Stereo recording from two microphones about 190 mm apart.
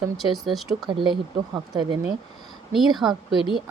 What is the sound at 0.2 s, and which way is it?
Speech, centre (ahead or behind).